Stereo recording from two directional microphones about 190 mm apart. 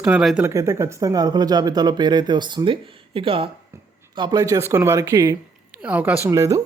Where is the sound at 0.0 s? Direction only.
5° right (ahead or behind).